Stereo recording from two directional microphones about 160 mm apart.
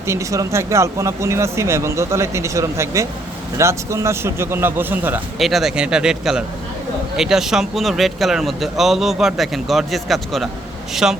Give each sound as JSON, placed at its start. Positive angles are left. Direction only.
{"t": 0.1, "sound": "speech", "side_deg": -20}
{"t": 5.4, "sound": "speech", "side_deg": 0}